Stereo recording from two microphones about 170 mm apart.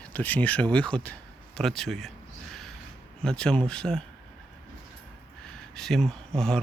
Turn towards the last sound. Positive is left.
turn(degrees=5)  # may be behind; listen again after turning